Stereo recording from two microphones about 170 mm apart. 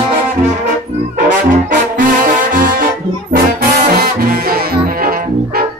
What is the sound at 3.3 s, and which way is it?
Brass instrument, 65° right (ahead or behind).